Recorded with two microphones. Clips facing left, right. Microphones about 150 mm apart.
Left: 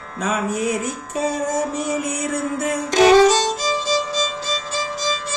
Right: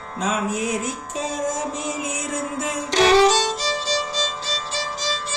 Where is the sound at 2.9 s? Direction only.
45° left (ahead or behind).